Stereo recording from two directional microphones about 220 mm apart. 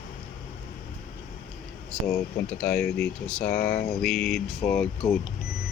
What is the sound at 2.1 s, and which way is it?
Speech, 5° left (ahead or behind).